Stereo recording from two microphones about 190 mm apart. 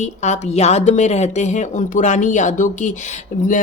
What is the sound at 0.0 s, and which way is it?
Speech, 35° left (ahead or behind).